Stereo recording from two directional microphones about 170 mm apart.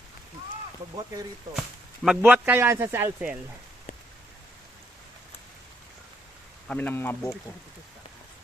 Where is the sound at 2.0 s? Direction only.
10° right (ahead or behind).